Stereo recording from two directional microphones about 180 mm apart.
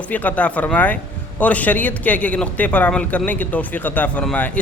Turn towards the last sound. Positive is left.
turn(degrees=10)  # may be behind; listen again after turning